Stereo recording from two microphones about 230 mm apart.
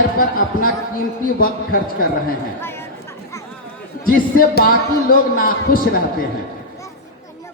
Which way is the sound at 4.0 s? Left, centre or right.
Left.